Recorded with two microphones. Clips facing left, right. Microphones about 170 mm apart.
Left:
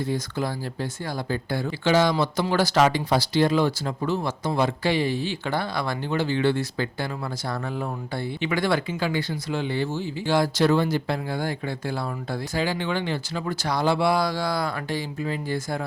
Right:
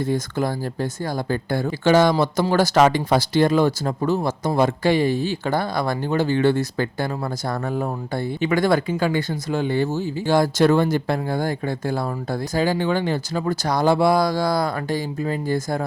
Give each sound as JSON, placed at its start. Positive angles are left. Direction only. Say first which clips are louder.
{"t": 0.0, "sound": "speech", "louder": "right 4 dB", "side_deg": -50}